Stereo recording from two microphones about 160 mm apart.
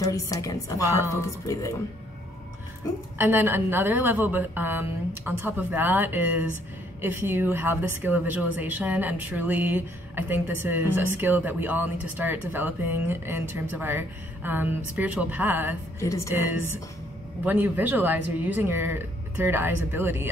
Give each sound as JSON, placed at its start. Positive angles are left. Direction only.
{"t": 0.0, "sound": "a woman's voice", "side_deg": 20}
{"t": 3.2, "sound": "a woman's voice", "side_deg": -15}
{"t": 16.0, "sound": "a woman's voice", "side_deg": 20}
{"t": 17.5, "sound": "a woman's voice", "side_deg": -10}